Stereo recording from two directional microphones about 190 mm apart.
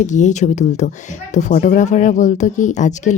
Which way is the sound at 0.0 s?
40° left (ahead or behind).